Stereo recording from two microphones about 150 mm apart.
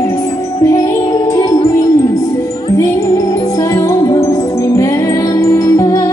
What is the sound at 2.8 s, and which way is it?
Music, 20° left (ahead or behind).